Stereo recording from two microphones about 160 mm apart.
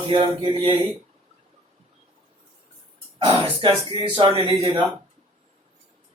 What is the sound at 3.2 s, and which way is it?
Speech, 35° right (ahead or behind).